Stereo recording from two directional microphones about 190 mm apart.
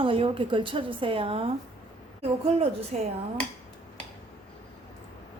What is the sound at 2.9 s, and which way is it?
Dishes, 35° right (ahead or behind).